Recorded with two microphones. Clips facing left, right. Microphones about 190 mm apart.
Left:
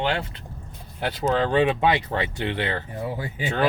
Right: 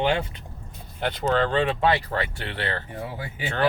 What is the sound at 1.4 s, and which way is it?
Speech, 15° left (ahead or behind).